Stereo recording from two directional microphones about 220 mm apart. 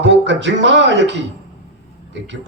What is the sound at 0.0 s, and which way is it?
Speech, 55° right (ahead or behind).